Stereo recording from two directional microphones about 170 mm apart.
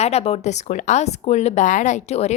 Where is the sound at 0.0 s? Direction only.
40° left (ahead or behind).